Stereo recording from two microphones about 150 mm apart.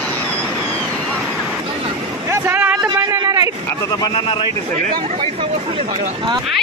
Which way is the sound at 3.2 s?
25° right (ahead or behind).